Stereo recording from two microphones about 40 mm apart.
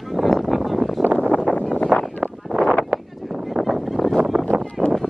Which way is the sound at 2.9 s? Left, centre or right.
Right.